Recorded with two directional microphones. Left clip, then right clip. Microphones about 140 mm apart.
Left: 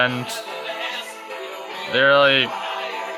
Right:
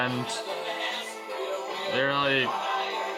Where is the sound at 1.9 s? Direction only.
35° left (ahead or behind).